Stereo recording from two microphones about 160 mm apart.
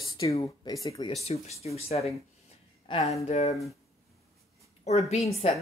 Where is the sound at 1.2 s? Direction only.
40° left (ahead or behind).